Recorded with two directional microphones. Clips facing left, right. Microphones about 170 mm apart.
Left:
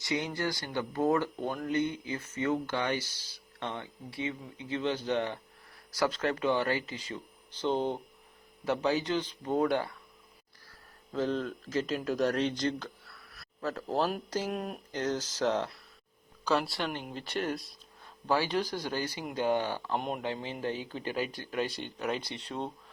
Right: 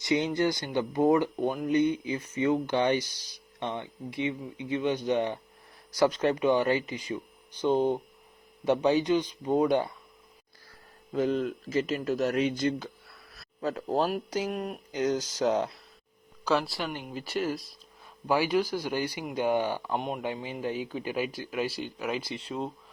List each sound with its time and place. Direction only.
0.0 s speech: 20° right (ahead or behind)
11.1 s speech: 10° right (ahead or behind)
13.3 s a sound: 20° right (ahead or behind)
14.1 s speech: 10° right (ahead or behind)
14.9 s speech: 10° right (ahead or behind)
18.3 s speech: 10° right (ahead or behind)
20.0 s speech: centre (ahead or behind)
20.2 s speech: 10° right (ahead or behind)